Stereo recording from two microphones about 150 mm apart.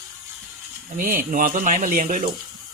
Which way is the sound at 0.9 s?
60° right (ahead or behind).